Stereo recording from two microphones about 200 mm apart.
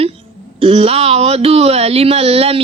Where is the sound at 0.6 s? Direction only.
30° right (ahead or behind).